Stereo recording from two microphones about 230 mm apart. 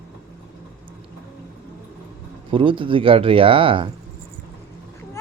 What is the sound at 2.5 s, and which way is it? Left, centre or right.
Speech, right.